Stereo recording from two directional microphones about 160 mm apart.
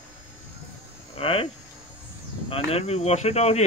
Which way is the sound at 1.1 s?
35° left (ahead or behind).